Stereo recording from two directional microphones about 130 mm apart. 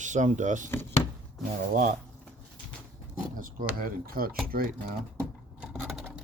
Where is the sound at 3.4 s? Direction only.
90° right.